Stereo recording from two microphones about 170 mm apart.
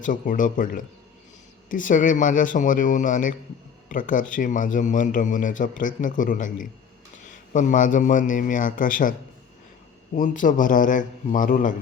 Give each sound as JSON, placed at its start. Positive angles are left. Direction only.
{"t": 0.0, "sound": "a man's voice", "side_deg": 50}
{"t": 10.2, "sound": "a man's voice", "side_deg": 50}